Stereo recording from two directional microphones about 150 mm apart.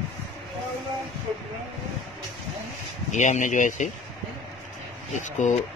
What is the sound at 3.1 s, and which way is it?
Speech, 55° left (ahead or behind).